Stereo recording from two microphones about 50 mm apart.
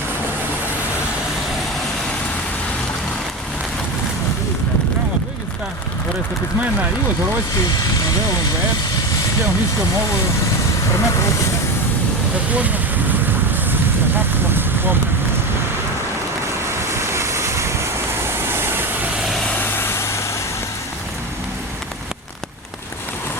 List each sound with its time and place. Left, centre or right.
10.9 s speech: left
12.5 s speech: right
14.5 s a sound: right
16.9 s vehicle: right
19.5 s vehicle: left